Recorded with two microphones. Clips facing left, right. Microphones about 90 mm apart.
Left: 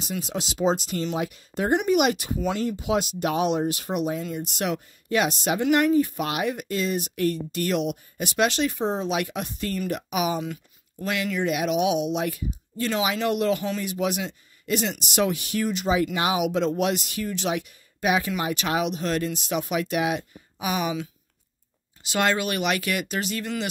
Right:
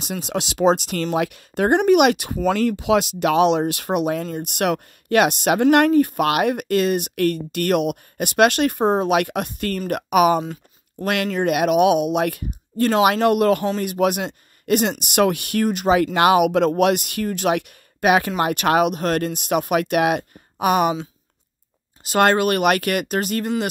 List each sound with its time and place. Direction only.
0.0 s speech: 65° right (ahead or behind)
10.4 s chopping: 35° right (ahead or behind)
11.4 s speech: 60° right (ahead or behind)
22.0 s speech: 45° right (ahead or behind)